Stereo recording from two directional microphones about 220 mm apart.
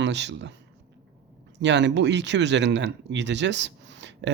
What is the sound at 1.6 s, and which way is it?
Speech, 55° right (ahead or behind).